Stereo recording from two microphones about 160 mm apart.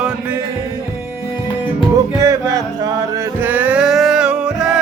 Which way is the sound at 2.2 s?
20° right (ahead or behind).